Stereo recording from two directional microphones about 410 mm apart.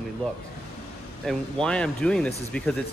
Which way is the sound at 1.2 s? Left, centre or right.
Centre.